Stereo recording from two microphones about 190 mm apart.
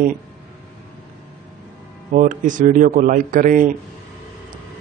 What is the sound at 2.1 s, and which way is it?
A man's voice, 45° right (ahead or behind).